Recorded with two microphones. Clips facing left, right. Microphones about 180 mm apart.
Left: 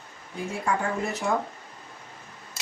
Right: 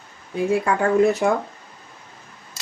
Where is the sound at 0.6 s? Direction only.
65° right (ahead or behind).